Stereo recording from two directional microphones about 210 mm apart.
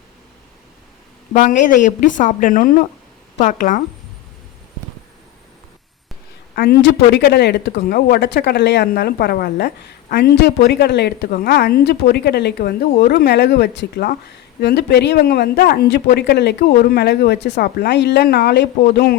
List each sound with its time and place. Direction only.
1.3 s speech: 35° left (ahead or behind)
6.6 s speech: 50° left (ahead or behind)